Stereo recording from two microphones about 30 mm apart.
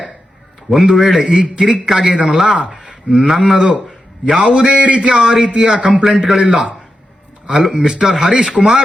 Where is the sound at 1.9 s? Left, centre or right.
Centre.